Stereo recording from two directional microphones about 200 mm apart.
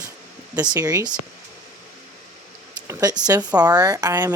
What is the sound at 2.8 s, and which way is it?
Speech, 20° right (ahead or behind).